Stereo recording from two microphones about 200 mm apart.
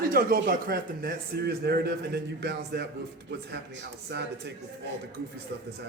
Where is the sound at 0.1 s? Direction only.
50° right (ahead or behind).